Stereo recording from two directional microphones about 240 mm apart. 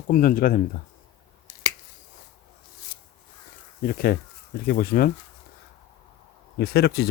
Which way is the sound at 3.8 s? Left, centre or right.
Left.